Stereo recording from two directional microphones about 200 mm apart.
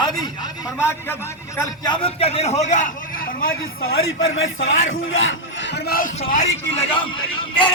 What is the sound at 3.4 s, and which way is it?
Speech, 50° left (ahead or behind).